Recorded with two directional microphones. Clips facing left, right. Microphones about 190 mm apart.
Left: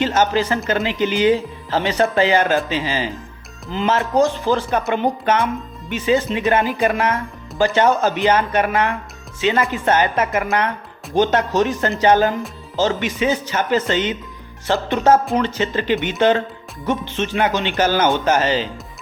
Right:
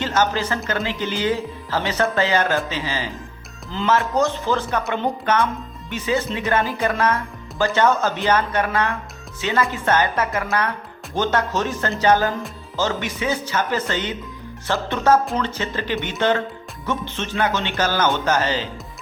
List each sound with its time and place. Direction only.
0.0 s a woman's voice: 15° left (ahead or behind)